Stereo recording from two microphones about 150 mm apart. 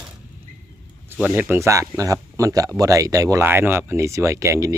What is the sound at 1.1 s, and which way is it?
Speech, 10° right (ahead or behind).